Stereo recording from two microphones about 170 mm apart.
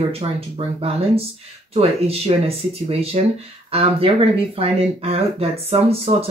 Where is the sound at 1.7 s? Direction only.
35° right (ahead or behind).